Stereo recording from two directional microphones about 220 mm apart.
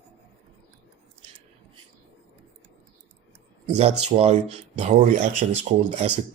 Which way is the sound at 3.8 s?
30° right (ahead or behind).